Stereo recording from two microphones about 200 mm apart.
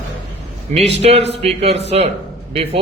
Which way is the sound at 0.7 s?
30° right (ahead or behind).